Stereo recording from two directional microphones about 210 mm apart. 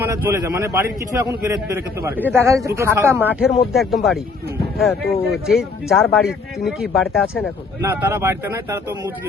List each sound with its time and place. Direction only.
0.0 s a man's voice: 10° right (ahead or behind)